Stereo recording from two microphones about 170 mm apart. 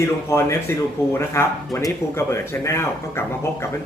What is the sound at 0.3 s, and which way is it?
Speech, 15° left (ahead or behind).